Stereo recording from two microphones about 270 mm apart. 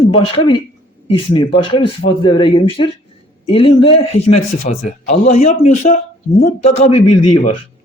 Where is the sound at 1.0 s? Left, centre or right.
Centre.